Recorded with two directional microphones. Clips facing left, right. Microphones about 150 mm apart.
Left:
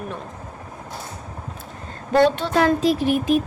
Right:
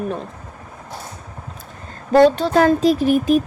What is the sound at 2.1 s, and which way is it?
A woman's voice, 35° right (ahead or behind).